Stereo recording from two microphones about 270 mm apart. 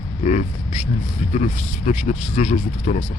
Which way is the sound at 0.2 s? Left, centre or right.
Left.